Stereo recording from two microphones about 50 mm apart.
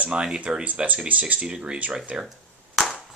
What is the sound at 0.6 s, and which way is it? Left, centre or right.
Speech, right.